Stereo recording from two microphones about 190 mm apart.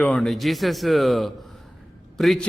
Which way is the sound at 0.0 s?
5° left (ahead or behind).